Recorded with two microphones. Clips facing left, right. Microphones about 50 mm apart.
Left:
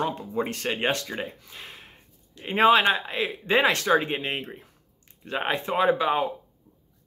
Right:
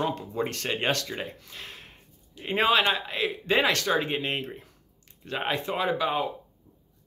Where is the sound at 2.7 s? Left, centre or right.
Left.